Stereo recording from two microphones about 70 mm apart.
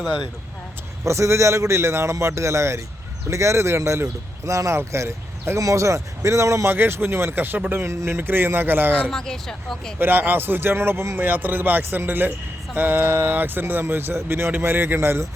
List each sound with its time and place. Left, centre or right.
1.0 s speech: right
6.7 s speech: right
9.0 s speech: centre
10.0 s speech: right